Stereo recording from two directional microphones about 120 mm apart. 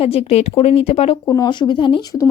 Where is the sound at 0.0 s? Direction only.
55° left (ahead or behind).